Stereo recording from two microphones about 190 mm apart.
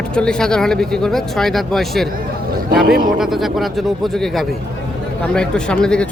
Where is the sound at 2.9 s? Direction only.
50° right (ahead or behind).